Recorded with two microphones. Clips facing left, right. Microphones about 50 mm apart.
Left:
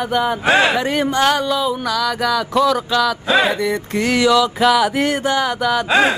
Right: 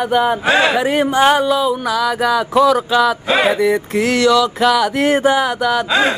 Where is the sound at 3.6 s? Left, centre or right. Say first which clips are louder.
Right 4 dB; centre.